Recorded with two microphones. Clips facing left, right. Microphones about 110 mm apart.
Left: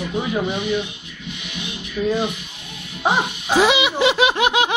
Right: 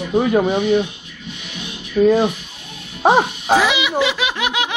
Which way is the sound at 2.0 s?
50° right (ahead or behind).